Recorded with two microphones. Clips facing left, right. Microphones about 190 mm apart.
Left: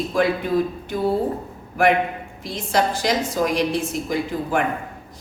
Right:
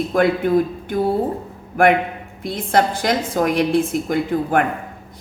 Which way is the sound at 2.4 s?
55° right (ahead or behind).